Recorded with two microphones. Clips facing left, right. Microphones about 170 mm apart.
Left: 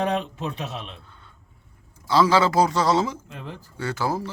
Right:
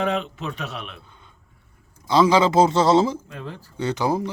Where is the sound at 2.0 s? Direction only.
20° right (ahead or behind).